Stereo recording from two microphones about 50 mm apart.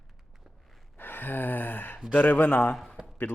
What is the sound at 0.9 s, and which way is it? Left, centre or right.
Gasp, left.